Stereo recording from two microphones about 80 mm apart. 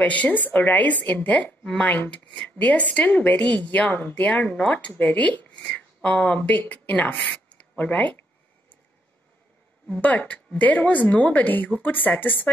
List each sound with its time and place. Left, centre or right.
0.0 s a woman's voice: centre
9.8 s a woman's voice: centre